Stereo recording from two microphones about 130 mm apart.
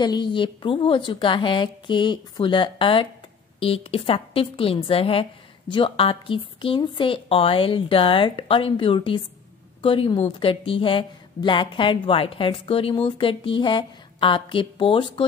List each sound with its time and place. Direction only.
0.0 s a woman's voice: 35° left (ahead or behind)